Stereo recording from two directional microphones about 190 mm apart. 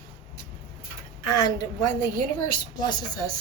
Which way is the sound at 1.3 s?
20° left (ahead or behind).